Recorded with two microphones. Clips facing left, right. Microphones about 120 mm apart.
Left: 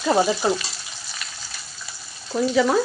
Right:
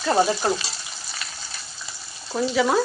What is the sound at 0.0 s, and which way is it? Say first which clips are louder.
Speech: left 1 dB; 5° left (ahead or behind).